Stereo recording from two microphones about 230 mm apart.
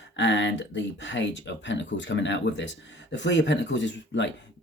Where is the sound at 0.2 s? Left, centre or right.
Left.